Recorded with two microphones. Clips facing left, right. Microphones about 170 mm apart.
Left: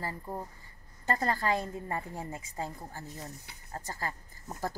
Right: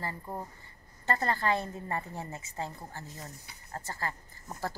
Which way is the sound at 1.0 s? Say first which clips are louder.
Even; 10° left (ahead or behind).